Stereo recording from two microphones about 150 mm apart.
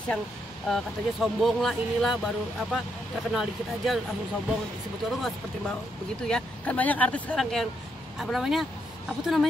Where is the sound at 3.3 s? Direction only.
Centre (ahead or behind).